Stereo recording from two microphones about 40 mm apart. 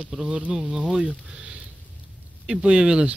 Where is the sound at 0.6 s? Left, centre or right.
Right.